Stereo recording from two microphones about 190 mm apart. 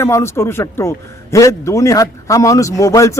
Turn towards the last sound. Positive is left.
turn(degrees=15)  # may be behind; listen again after turning